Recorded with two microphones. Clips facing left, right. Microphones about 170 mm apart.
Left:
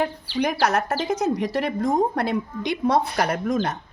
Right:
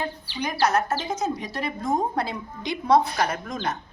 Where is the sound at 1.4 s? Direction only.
80° left; by 3.6 s 55° left (ahead or behind).